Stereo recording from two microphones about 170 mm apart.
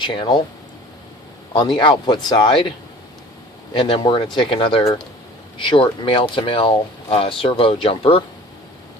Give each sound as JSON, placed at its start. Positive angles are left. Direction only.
{"t": 0.0, "sound": "speech", "side_deg": 30}
{"t": 1.5, "sound": "speech", "side_deg": 25}
{"t": 3.8, "sound": "speech", "side_deg": 30}